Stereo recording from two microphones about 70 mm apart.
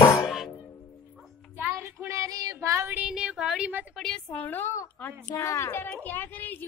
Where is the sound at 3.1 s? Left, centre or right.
Centre.